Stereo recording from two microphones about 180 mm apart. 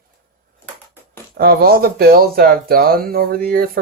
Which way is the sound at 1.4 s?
55° right (ahead or behind).